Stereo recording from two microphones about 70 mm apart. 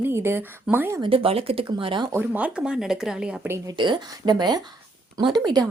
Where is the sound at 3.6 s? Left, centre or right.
Right.